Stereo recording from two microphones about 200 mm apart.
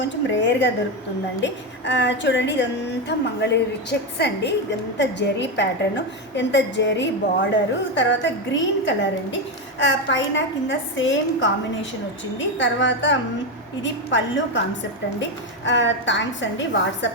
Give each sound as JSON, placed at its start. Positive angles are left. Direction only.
{"t": 0.3, "sound": "a woman's voice", "side_deg": 65}